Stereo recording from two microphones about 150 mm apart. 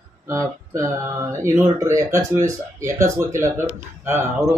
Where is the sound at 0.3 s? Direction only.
20° right (ahead or behind).